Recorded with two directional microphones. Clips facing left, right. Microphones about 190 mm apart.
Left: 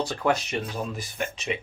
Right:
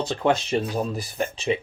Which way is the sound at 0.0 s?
25° right (ahead or behind).